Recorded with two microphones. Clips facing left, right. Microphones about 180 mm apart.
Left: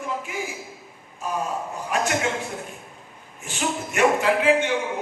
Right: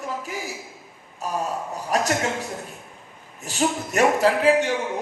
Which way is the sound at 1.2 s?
40° right (ahead or behind).